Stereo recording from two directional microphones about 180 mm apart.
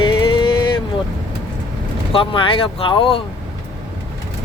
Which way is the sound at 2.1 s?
30° left (ahead or behind).